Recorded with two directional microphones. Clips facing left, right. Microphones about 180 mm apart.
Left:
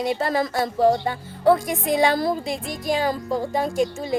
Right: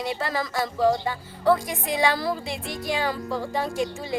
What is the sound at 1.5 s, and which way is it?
A woman's voice, 50° left (ahead or behind).